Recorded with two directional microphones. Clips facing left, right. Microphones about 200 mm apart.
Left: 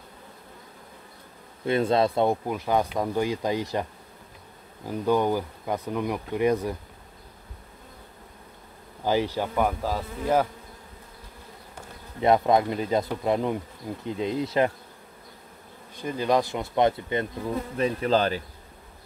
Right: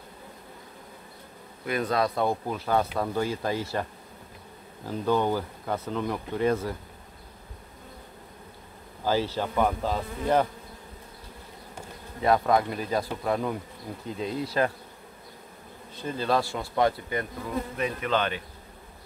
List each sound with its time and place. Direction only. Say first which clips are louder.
1.6 s speech: left 4 dB; 25° left (ahead or behind)
4.8 s speech: left 2 dB; 15° left (ahead or behind)
9.0 s speech: left 2 dB; 15° left (ahead or behind)
12.2 s speech: left 2 dB; 20° left (ahead or behind)
16.0 s speech: left 3 dB; 15° left (ahead or behind)
17.7 s insect: left 5 dB; 35° left (ahead or behind)